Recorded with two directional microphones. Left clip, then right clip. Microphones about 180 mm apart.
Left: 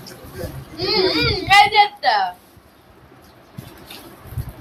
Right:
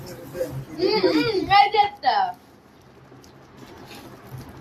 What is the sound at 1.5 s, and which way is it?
Speech, centre (ahead or behind).